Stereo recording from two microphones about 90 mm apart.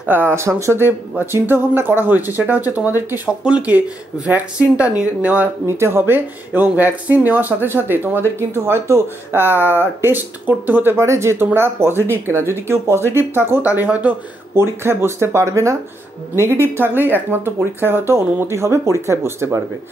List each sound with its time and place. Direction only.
0.0 s speech: 20° right (ahead or behind)
5.7 s speech: 30° right (ahead or behind)
16.7 s speech: 25° right (ahead or behind)